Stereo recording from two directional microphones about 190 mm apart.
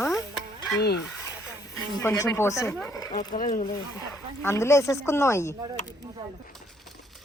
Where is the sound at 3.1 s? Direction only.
40° left (ahead or behind).